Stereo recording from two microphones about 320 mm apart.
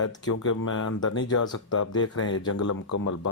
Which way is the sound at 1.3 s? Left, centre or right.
Left.